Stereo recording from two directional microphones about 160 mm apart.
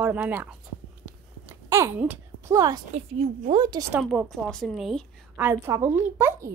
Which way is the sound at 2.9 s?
40° right (ahead or behind).